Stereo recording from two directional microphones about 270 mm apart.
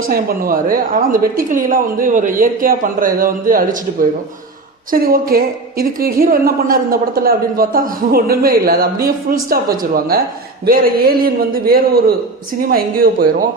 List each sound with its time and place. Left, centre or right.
0.1 s a woman's voice: right
4.9 s a woman's voice: right